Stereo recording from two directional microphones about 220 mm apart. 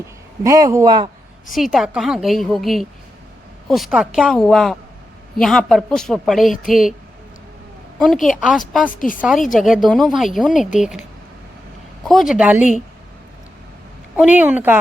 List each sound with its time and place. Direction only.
0.4 s a man's voice: 15° right (ahead or behind)
1.5 s a woman's voice: centre (ahead or behind)
7.9 s a woman's voice: centre (ahead or behind)
8.9 s speech: 40° left (ahead or behind)
9.5 s a woman's voice: centre (ahead or behind)
12.0 s a woman's voice: centre (ahead or behind)
14.2 s a man's voice: 5° right (ahead or behind)